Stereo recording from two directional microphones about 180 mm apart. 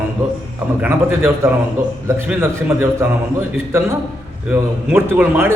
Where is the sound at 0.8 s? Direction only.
10° right (ahead or behind).